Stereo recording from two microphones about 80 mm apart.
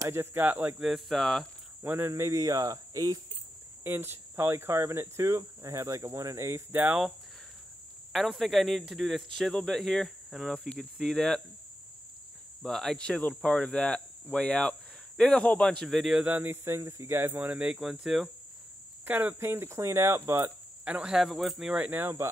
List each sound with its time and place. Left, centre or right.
0.1 s speech: right
0.7 s a man's voice: centre
1.8 s speech: right
3.8 s speech: right
8.1 s a man's voice: centre
12.6 s a man's voice: centre
16.3 s speech: right
16.6 s speech: right
17.6 s a man's voice: centre
19.0 s speech: right
20.8 s speech: centre
21.8 s speech: right